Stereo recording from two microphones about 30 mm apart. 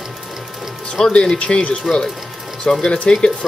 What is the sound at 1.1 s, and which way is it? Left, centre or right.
Speech, left.